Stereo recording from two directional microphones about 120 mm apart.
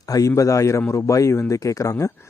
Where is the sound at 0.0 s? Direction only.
30° left (ahead or behind).